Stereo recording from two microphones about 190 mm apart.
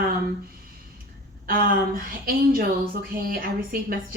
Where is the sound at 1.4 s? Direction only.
50° right (ahead or behind).